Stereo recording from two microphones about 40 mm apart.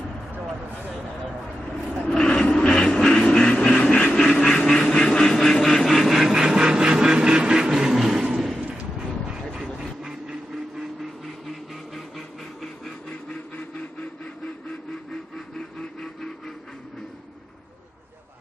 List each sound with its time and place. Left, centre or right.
2.0 s vehicle: left
4.3 s a sound: centre
7.9 s vehicle: centre
15.8 s vehicle: centre